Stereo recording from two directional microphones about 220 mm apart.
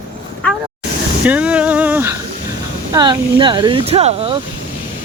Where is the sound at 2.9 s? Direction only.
20° right (ahead or behind).